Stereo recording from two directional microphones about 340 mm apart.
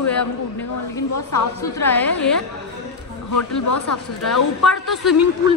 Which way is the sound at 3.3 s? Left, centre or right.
Left.